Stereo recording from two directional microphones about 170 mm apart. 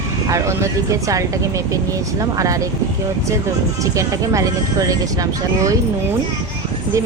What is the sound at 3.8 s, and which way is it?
Speech, 20° right (ahead or behind).